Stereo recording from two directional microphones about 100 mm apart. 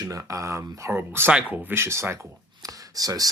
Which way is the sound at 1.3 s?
10° right (ahead or behind).